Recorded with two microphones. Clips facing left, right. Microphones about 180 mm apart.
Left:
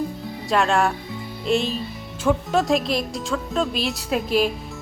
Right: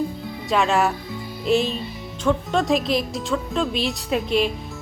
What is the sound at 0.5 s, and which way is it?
Speech, centre (ahead or behind).